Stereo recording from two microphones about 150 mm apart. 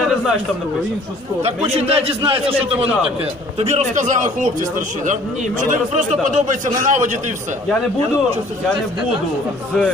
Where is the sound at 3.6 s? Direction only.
50° right (ahead or behind).